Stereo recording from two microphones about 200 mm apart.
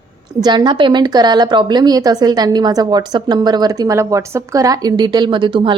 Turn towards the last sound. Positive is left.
turn(degrees=-25)  # may be behind; listen again after turning